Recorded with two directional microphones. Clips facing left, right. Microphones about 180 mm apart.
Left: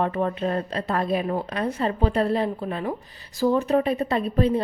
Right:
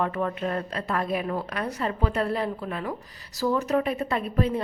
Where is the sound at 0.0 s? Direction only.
25° left (ahead or behind).